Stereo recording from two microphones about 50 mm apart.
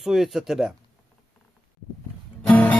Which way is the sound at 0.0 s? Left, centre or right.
Centre.